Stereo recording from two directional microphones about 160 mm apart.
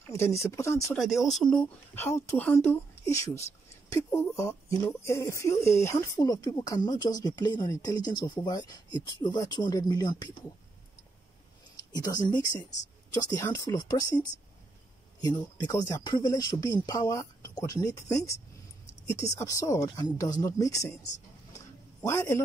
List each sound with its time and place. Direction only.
0.1 s speech: 15° left (ahead or behind)
0.9 s speech: centre (ahead or behind); by 10.3 s 25° left (ahead or behind)
11.9 s speech: 25° left (ahead or behind)
15.1 s speech: 25° left (ahead or behind)
22.0 s speech: 20° left (ahead or behind)